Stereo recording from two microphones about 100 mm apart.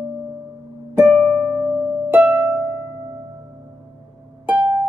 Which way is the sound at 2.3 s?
5° right (ahead or behind).